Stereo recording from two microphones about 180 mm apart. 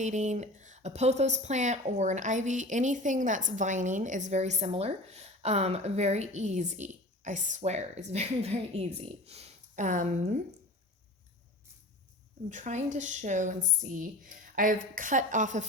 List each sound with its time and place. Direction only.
0.0 s a woman's voice: 40° right (ahead or behind)
12.5 s a woman's voice: 40° right (ahead or behind)